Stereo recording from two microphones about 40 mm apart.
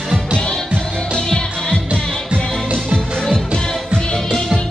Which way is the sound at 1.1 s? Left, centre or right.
Left.